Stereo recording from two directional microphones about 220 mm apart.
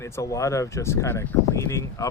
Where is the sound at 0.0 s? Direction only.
15° left (ahead or behind).